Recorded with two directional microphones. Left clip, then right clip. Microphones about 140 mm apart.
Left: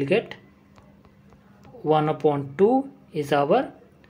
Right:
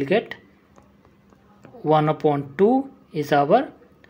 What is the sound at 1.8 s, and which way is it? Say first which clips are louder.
Speech: right 2 dB; 15° right (ahead or behind).